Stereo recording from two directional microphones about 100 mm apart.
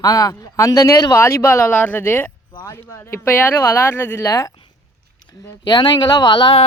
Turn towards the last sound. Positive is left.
turn(degrees=50)  # may be behind; listen again after turning